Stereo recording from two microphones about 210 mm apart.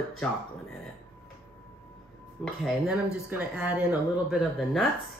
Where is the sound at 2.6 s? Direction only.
5° right (ahead or behind).